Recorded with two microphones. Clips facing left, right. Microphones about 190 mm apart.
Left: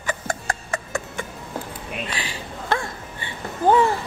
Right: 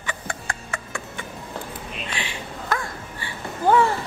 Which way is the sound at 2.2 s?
35° left (ahead or behind).